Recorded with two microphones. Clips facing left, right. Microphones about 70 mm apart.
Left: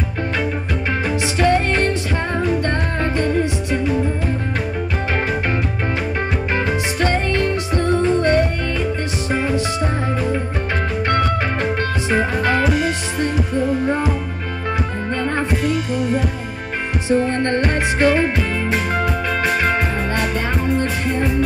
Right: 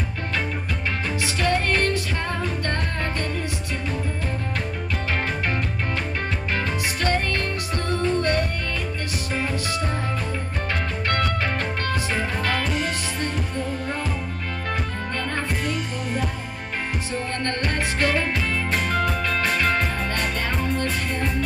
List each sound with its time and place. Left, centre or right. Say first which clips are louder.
1.2 s music: left 6 dB; left
6.5 s music: left 5 dB; left
11.1 s music: left 4 dB; left
12.6 s music: left 8 dB; centre
15.6 s music: left 8 dB; centre
17.1 s music: left 12 dB; left
18.7 s music: left 2 dB; centre